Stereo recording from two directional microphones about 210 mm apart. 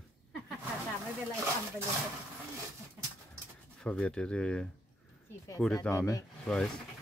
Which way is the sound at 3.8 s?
5° left (ahead or behind).